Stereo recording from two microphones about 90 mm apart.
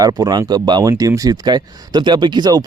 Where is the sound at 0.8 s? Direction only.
40° right (ahead or behind).